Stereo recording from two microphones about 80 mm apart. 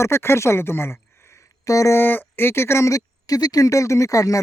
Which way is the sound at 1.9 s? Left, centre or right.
Left.